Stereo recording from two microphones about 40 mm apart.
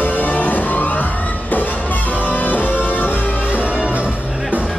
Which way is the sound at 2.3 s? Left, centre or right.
Left.